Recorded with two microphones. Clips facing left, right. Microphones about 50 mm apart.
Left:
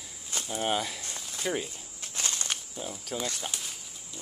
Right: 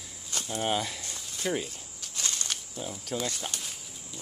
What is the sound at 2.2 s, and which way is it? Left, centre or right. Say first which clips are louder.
Snake: left 1 dB; left.